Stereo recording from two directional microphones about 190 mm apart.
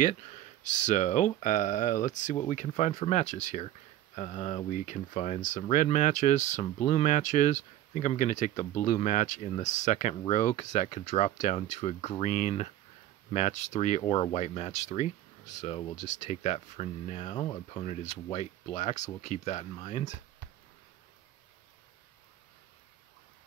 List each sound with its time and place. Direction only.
0.7 s speech: 40° left (ahead or behind)